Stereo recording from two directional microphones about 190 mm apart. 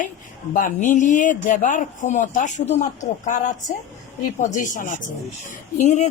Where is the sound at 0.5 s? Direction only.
45° left (ahead or behind).